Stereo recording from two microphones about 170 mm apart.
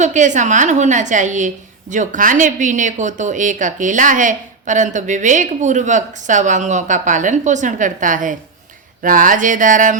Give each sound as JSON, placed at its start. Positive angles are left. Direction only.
{"t": 0.0, "sound": "speech", "side_deg": -45}